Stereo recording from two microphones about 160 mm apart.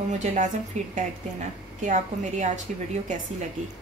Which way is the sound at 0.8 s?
45° right (ahead or behind).